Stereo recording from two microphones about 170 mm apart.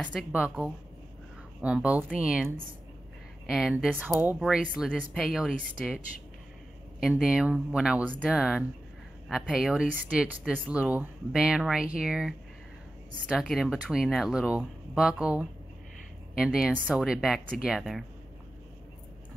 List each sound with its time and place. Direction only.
0.0 s speech: 5° left (ahead or behind)
0.3 s speech: 5° right (ahead or behind)
7.0 s speech: centre (ahead or behind)